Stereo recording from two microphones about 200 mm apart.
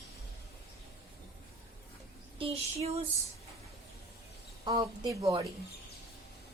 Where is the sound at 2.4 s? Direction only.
30° right (ahead or behind).